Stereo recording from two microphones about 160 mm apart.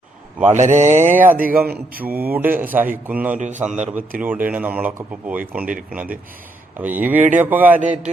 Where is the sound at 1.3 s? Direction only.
60° right (ahead or behind).